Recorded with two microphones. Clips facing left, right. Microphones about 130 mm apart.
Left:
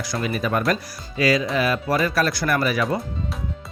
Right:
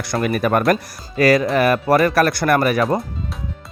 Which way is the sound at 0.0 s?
55° right (ahead or behind).